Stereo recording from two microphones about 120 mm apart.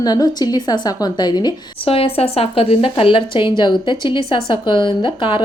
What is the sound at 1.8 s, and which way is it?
A woman's voice, 50° left (ahead or behind).